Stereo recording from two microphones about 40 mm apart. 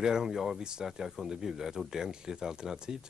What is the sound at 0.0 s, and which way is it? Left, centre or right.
Speech, centre.